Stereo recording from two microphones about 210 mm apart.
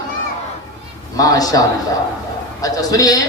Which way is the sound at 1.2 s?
15° left (ahead or behind).